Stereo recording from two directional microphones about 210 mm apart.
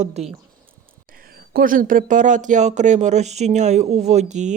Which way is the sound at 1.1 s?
45° right (ahead or behind).